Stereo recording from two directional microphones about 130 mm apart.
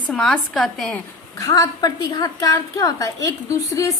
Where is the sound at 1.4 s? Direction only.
25° left (ahead or behind).